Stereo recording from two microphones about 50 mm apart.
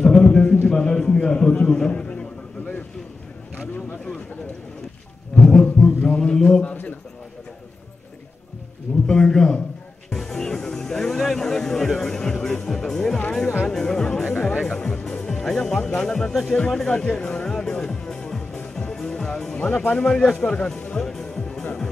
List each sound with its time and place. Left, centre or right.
0.0 s a sound: centre
0.7 s a man's voice: centre
5.6 s music: left
9.0 s a man's voice: centre
10.0 s music: centre
14.2 s music: left
14.7 s music: centre
16.1 s a man's voice: centre
16.5 s music: centre
19.8 s a man's voice: left
20.1 s a man's voice: centre
21.0 s music: centre